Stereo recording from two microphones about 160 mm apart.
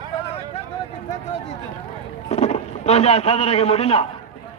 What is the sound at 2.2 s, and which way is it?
A man's voice, 40° left (ahead or behind).